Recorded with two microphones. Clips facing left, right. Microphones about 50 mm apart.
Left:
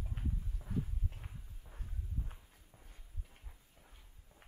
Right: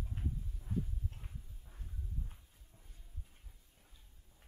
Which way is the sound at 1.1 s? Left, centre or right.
Left.